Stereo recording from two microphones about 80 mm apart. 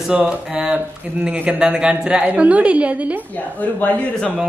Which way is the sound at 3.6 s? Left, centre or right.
Centre.